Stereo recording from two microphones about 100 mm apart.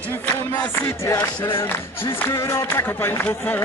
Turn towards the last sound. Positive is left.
turn(degrees=25)  # may be behind; listen again after turning